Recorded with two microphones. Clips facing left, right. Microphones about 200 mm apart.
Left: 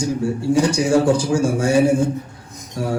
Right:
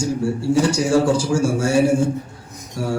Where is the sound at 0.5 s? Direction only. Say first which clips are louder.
Left 1 dB; 15° left (ahead or behind).